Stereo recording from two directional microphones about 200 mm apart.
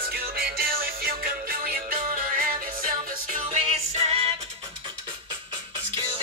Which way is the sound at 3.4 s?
30° right (ahead or behind).